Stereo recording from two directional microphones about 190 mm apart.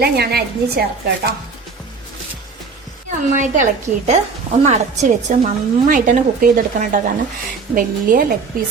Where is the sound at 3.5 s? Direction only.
40° right (ahead or behind).